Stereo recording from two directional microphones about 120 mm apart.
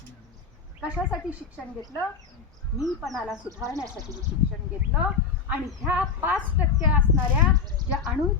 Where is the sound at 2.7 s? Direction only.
Centre (ahead or behind).